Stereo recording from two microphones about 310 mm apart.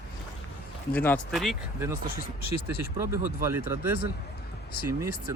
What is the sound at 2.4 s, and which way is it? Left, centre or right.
Speech, left.